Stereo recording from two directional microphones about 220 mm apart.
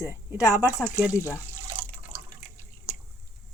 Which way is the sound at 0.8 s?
5° right (ahead or behind).